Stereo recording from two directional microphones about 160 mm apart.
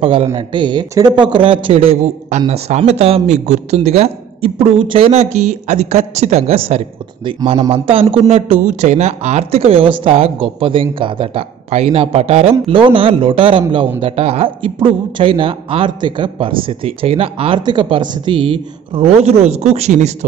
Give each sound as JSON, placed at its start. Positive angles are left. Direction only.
{"t": 0.0, "sound": "speech", "side_deg": -35}